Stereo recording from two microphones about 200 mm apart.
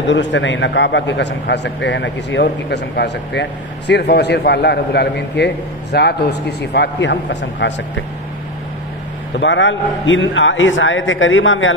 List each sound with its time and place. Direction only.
0.1 s a man's voice: 65° left (ahead or behind)
9.4 s a man's voice: 70° left (ahead or behind)